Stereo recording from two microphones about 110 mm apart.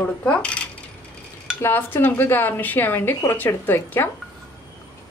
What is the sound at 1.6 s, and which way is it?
A woman's voice, 20° left (ahead or behind).